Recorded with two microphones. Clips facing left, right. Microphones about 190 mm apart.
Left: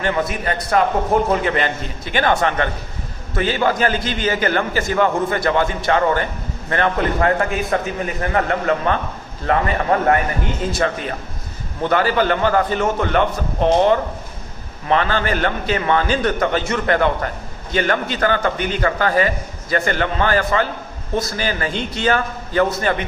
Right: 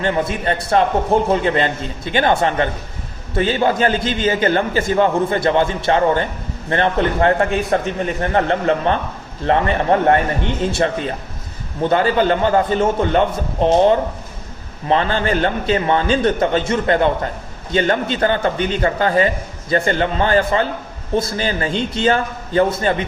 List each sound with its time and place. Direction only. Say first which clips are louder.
0.0 s a man's voice: right 2 dB; 25° right (ahead or behind)